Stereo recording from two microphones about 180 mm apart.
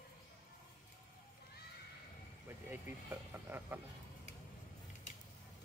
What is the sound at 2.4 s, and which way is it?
Speech, 15° right (ahead or behind).